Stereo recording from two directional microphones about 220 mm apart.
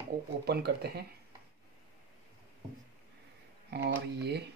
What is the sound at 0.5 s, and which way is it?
Speech, 45° right (ahead or behind).